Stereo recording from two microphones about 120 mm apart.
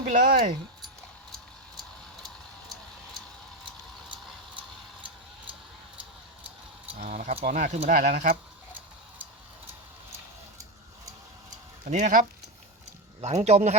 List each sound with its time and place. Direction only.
0.1 s speech: 90° right
7.0 s speech: 70° right (ahead or behind); by 8.4 s 85° right
11.9 s speech: 85° right
13.2 s a man's voice: 65° right (ahead or behind)